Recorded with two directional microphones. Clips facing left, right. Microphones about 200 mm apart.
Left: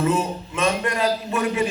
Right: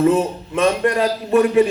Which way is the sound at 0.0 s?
50° right (ahead or behind).